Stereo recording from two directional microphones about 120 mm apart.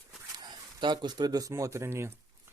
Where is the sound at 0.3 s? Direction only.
35° right (ahead or behind).